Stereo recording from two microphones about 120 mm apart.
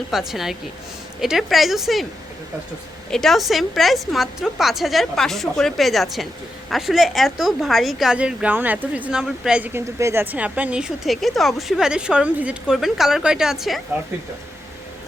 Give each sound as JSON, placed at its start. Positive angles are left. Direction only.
{"t": 0.1, "sound": "a woman's voice", "side_deg": -5}
{"t": 3.1, "sound": "a woman's voice", "side_deg": 5}
{"t": 10.0, "sound": "speech", "side_deg": -25}
{"t": 10.3, "sound": "a woman's voice", "side_deg": -10}